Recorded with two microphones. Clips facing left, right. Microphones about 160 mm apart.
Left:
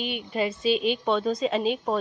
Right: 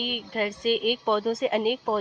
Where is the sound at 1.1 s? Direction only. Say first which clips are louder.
Right 1 dB; 10° right (ahead or behind).